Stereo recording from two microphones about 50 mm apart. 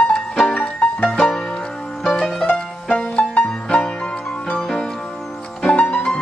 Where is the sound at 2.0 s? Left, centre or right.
Centre.